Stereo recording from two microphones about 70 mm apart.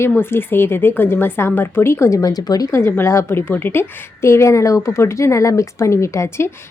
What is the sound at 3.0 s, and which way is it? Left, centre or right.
A woman's voice, left.